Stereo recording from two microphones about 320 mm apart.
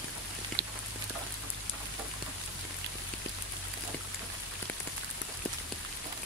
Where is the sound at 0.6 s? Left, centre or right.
Right.